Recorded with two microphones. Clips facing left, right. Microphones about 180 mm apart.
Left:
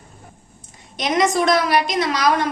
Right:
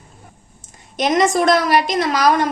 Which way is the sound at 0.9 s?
45° right (ahead or behind).